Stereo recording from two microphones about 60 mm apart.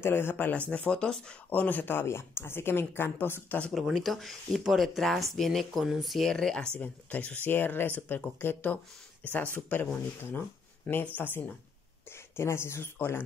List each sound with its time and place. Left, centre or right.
0.0 s speech: left; by 1.3 s centre
1.5 s speech: left
3.7 s speech: centre
6.3 s speech: centre
6.8 s speech: left
11.1 s speech: left
12.4 s speech: left